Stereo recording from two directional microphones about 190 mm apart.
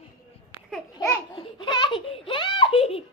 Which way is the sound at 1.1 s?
25° left (ahead or behind).